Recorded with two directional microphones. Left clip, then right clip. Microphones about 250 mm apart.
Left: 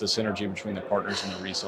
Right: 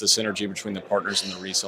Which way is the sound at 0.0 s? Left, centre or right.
Right.